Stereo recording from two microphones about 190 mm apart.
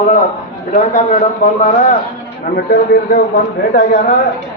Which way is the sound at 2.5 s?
55° left (ahead or behind).